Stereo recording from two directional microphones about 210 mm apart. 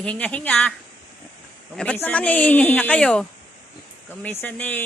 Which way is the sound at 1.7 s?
5° left (ahead or behind).